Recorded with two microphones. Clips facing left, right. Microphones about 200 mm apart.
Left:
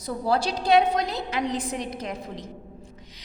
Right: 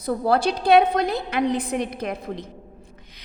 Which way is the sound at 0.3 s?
55° right (ahead or behind).